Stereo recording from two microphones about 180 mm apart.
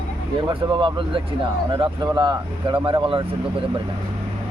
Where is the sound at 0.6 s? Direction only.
25° right (ahead or behind).